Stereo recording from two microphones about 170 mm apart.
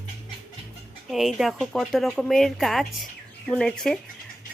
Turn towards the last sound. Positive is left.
turn(degrees=5)  # may be behind; listen again after turning